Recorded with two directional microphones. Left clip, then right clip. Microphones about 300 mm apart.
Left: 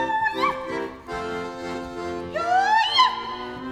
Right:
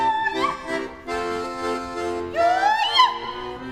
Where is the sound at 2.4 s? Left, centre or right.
Right.